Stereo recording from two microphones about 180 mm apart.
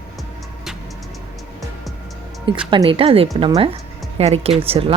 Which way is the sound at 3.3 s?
20° right (ahead or behind).